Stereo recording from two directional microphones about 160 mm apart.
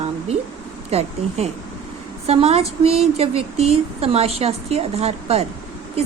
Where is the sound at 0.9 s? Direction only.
40° right (ahead or behind).